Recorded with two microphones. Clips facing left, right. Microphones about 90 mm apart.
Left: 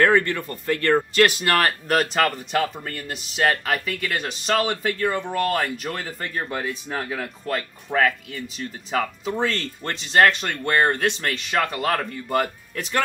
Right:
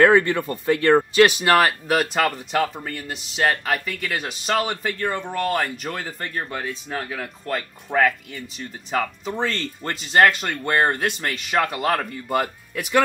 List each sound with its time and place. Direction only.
0.0 s speech: 15° right (ahead or behind)